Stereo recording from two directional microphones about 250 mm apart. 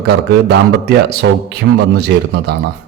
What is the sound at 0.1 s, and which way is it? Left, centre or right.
A man's voice, right.